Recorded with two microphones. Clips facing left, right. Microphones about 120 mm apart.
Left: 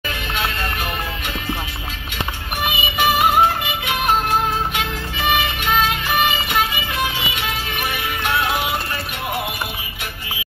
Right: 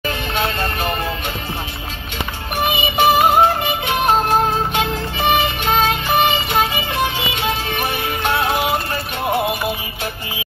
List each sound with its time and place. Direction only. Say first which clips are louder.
0.3 s music: right 2 dB; 30° right (ahead or behind)
2.6 s music: right 4 dB; 30° right (ahead or behind)